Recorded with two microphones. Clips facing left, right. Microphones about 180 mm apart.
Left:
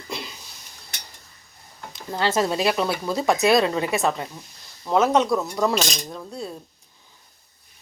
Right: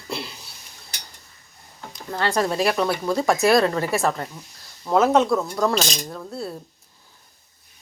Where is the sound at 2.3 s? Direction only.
5° left (ahead or behind).